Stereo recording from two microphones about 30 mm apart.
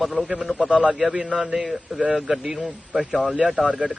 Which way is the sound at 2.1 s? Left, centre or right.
Centre.